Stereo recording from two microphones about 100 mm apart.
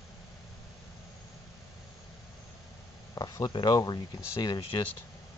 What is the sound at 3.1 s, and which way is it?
Speech, 40° left (ahead or behind).